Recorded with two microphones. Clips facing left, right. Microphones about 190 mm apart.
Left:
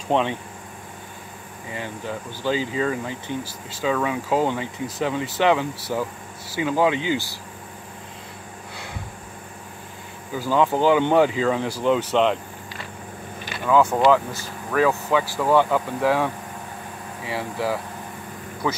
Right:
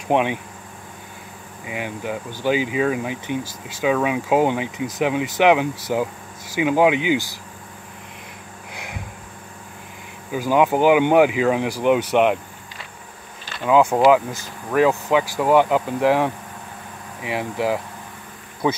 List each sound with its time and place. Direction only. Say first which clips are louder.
0.1 s speech: right 2 dB; 10° right (ahead or behind)
1.7 s speech: right 3 dB; 15° right (ahead or behind)
8.7 s a sound: right 2 dB; 15° right (ahead or behind)
10.3 s speech: right 3 dB; 15° right (ahead or behind)
13.7 s speech: right 3 dB; 15° right (ahead or behind)